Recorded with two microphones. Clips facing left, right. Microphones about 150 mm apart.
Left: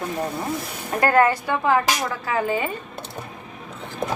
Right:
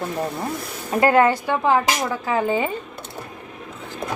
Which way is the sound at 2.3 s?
25° right (ahead or behind).